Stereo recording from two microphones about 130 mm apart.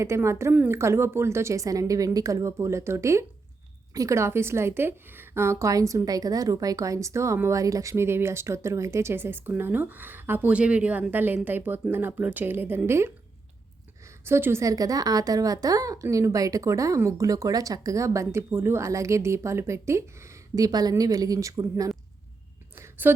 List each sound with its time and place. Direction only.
0.0 s a woman's voice: 20° right (ahead or behind)
14.3 s a woman's voice: 20° right (ahead or behind)
22.7 s a sound: 20° right (ahead or behind)